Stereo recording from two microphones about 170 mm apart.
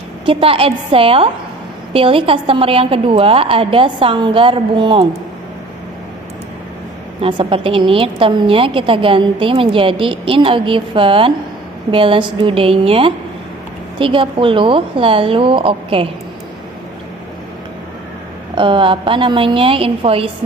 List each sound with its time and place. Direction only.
0.3 s a woman's voice: 30° right (ahead or behind)
7.2 s a woman's voice: 30° right (ahead or behind)
18.5 s a woman's voice: 30° right (ahead or behind)